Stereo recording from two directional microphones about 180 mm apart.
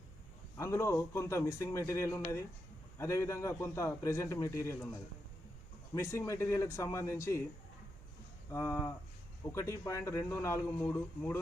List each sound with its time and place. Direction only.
0.5 s a man's voice: 15° left (ahead or behind)
5.9 s a man's voice: 15° left (ahead or behind)
8.5 s a man's voice: 15° left (ahead or behind)